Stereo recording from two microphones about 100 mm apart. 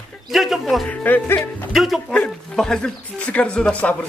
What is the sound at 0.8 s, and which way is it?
Speech, 15° left (ahead or behind).